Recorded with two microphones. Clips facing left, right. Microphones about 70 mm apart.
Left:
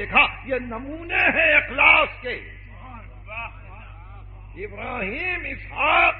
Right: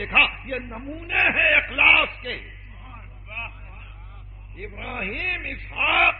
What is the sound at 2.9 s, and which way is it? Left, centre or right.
Vehicle, centre.